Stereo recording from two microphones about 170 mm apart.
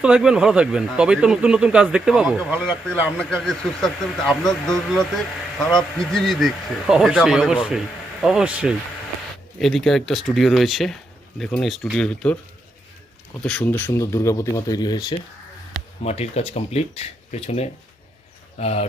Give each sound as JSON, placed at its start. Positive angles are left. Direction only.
{"t": 0.0, "sound": "speech", "side_deg": -5}
{"t": 2.6, "sound": "speech", "side_deg": 5}
{"t": 13.4, "sound": "speech", "side_deg": 5}
{"t": 16.0, "sound": "speech", "side_deg": 40}